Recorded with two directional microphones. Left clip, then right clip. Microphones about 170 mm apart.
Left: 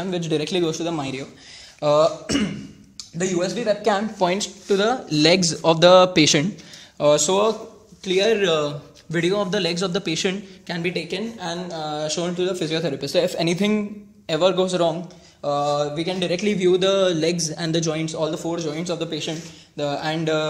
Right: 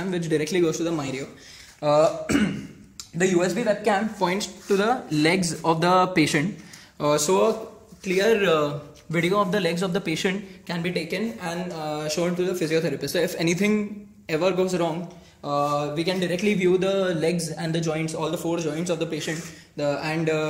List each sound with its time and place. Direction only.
0.3 s speech: 25° left (ahead or behind)
3.5 s speech: 40° left (ahead or behind)
18.1 s speech: 30° left (ahead or behind)